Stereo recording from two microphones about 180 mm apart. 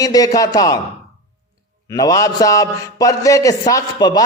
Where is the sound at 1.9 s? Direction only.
20° left (ahead or behind).